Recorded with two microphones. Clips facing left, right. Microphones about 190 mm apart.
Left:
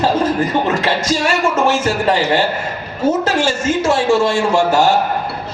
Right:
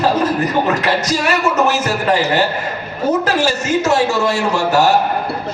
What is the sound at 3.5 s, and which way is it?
Speech, 50° left (ahead or behind).